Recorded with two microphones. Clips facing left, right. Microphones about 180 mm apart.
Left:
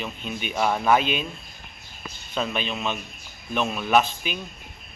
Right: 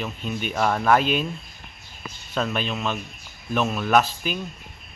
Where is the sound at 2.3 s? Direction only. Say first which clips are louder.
Right 2 dB; 5° right (ahead or behind).